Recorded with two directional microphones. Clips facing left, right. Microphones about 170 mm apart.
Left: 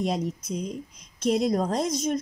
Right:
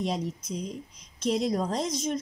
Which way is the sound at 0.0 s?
50° left (ahead or behind).